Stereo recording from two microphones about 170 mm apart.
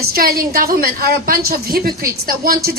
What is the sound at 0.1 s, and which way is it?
A woman's voice, 60° right (ahead or behind).